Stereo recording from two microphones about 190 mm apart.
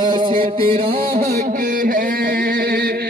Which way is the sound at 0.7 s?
50° right (ahead or behind).